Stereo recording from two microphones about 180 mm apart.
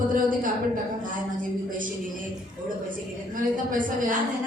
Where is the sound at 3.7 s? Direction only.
50° right (ahead or behind).